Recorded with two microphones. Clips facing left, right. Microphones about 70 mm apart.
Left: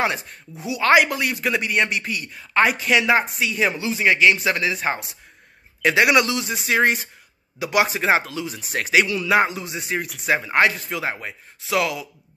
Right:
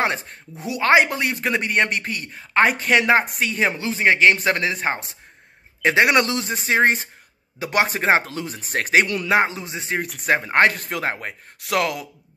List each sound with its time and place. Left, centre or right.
0.0 s a man's voice: right
9.3 s speech: right